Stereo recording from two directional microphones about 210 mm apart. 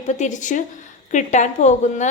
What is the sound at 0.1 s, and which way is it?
A woman's voice, 35° left (ahead or behind).